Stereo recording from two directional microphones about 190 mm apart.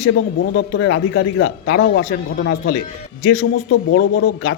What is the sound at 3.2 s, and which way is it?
Speech, 60° left (ahead or behind).